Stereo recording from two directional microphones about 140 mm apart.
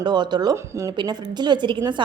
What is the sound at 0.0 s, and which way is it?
A woman's voice, 30° right (ahead or behind).